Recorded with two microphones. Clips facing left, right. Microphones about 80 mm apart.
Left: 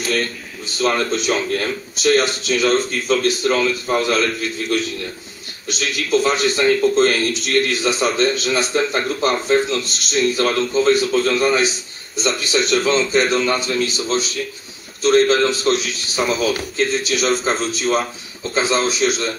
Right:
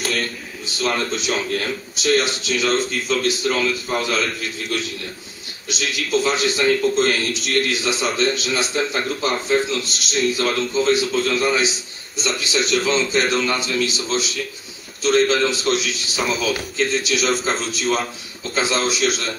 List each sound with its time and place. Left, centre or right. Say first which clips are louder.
0.7 s a man's voice: left 4 dB; left
17.2 s a man's voice: left 2 dB; centre
18.5 s a man's voice: left 2 dB; left